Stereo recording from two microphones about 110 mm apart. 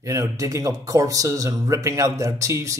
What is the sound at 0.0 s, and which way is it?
Speech, 30° right (ahead or behind).